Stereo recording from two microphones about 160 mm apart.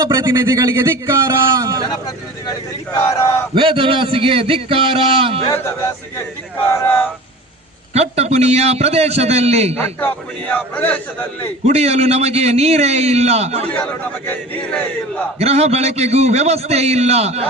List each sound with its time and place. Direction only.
0.1 s speech: 25° right (ahead or behind)
2.0 s speech: 20° left (ahead or behind)
3.5 s a man's voice: 35° right (ahead or behind)
6.7 s a sound: 10° left (ahead or behind)
8.1 s a man's voice: 40° right (ahead or behind)
9.7 s a sound: 15° left (ahead or behind)
11.6 s a man's voice: 40° right (ahead or behind)
13.7 s a sound: 10° left (ahead or behind)
15.4 s a man's voice: 40° right (ahead or behind)